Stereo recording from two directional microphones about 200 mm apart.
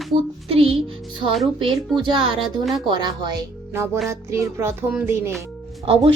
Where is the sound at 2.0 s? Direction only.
25° right (ahead or behind).